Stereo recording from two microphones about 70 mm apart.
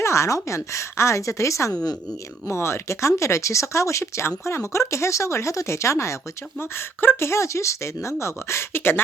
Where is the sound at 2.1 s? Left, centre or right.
Left.